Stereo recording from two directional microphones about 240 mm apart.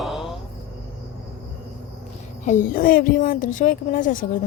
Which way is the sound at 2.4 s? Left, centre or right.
Left.